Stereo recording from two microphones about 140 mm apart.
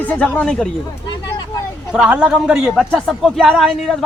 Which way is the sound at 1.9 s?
5° right (ahead or behind).